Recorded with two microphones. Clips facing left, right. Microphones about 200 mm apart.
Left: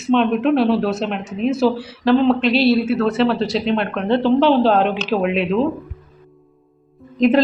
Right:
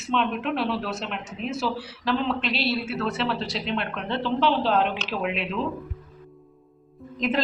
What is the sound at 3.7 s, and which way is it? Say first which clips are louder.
A woman's voice: left 10 dB; 60° left (ahead or behind).